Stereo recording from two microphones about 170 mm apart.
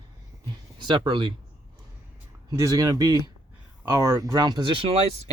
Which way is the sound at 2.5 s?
20° right (ahead or behind).